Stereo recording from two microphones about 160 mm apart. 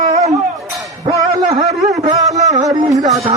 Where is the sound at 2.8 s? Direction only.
20° right (ahead or behind).